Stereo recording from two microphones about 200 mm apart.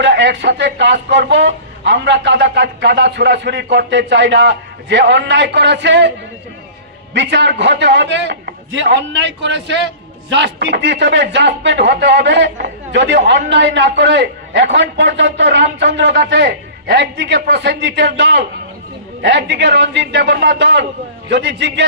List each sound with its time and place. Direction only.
0.0 s speech: 60° right (ahead or behind)